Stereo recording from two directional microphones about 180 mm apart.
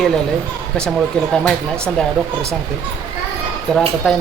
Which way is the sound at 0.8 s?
5° left (ahead or behind).